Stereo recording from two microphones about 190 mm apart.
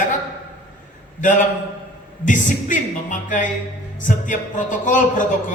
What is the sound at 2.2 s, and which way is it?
A man's voice, 40° left (ahead or behind).